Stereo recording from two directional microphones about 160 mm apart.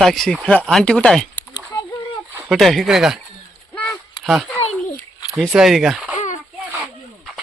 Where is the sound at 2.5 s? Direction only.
Centre (ahead or behind).